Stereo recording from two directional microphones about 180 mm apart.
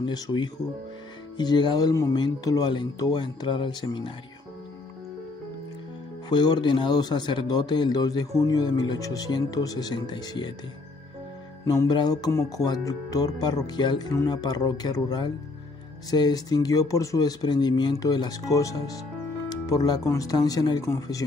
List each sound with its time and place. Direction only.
0.0 s speech: 25° left (ahead or behind)
6.2 s speech: 25° left (ahead or behind)
11.6 s speech: 20° left (ahead or behind)